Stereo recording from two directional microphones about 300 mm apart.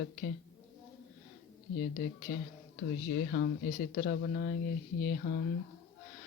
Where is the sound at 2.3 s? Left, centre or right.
Left.